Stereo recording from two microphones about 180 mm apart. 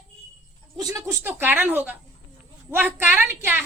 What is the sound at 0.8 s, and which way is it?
A woman's voice, 20° right (ahead or behind).